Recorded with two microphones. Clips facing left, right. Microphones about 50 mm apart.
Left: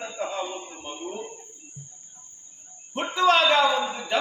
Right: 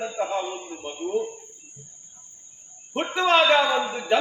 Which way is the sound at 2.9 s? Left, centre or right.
Right.